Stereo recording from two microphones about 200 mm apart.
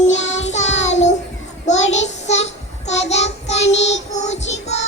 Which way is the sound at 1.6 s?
35° left (ahead or behind).